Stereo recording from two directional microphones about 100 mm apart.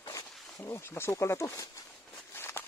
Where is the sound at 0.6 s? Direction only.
25° left (ahead or behind).